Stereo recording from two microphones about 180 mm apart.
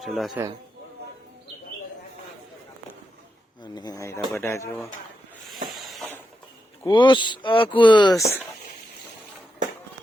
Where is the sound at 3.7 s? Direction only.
20° left (ahead or behind).